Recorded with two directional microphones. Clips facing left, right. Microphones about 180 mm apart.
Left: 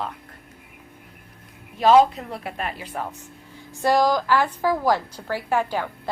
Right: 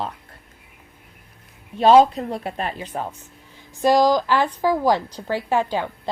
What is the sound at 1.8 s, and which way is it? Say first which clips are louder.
A woman's voice: right 2 dB; 30° right (ahead or behind).